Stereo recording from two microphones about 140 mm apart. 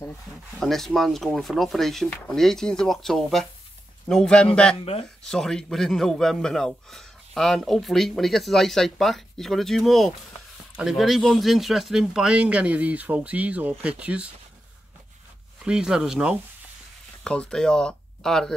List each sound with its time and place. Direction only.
0.5 s speech: centre (ahead or behind)
4.7 s speech: 45° left (ahead or behind)
5.2 s speech: 5° left (ahead or behind)
15.6 s speech: 5° right (ahead or behind)
17.2 s speech: 5° left (ahead or behind)